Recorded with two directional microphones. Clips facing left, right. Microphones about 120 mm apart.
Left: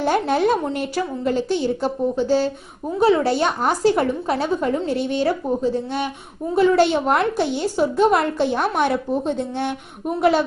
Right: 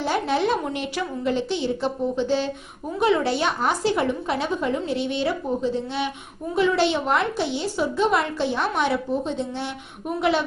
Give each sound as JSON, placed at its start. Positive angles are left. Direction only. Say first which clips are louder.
{"t": 0.0, "sound": "a woman's voice", "louder": "left 4 dB", "side_deg": 50}
{"t": 6.6, "sound": "a woman's voice", "louder": "left 5 dB", "side_deg": 45}